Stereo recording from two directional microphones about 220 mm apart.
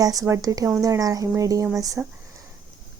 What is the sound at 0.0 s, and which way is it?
A woman's voice, 15° right (ahead or behind).